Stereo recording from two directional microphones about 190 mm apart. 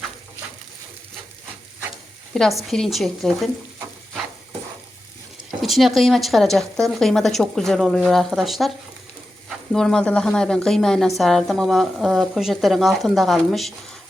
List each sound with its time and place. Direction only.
2.3 s a woman's voice: centre (ahead or behind)
5.6 s a woman's voice: centre (ahead or behind)
9.7 s a woman's voice: 5° left (ahead or behind)